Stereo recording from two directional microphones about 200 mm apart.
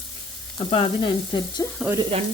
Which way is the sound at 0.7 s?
25° left (ahead or behind).